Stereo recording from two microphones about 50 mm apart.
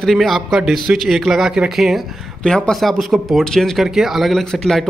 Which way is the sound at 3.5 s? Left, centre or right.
Centre.